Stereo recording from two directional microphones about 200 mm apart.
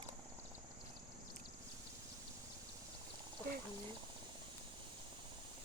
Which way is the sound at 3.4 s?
15° left (ahead or behind).